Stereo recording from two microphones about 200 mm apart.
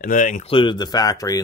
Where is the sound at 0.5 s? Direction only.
20° left (ahead or behind).